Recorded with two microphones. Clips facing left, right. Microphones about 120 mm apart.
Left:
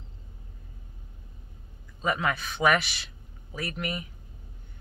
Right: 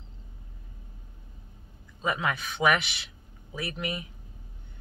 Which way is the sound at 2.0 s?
15° right (ahead or behind).